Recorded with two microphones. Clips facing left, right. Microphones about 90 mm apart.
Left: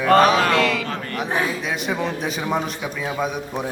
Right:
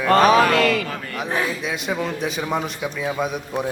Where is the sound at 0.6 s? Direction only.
45° right (ahead or behind).